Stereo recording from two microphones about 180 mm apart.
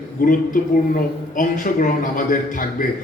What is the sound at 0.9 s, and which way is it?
A man's voice, 50° left (ahead or behind).